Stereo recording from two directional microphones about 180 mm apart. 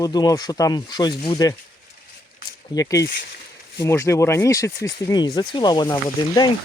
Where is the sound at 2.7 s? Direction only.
15° left (ahead or behind).